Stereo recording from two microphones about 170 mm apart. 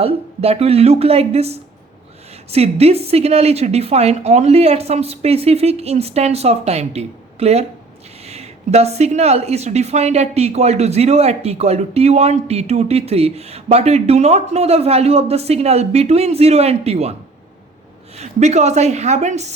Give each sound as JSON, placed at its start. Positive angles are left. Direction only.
{"t": 0.0, "sound": "a woman's voice", "side_deg": -35}
{"t": 18.2, "sound": "a woman's voice", "side_deg": -40}